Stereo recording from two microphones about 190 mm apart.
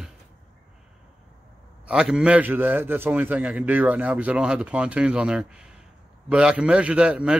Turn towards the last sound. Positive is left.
turn(degrees=-5)  # may be behind; listen again after turning